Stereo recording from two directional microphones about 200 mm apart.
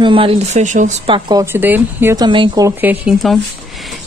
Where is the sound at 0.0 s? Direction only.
25° right (ahead or behind).